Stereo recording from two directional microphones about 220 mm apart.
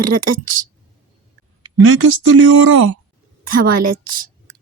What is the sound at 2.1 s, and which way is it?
Speech, 75° right (ahead or behind).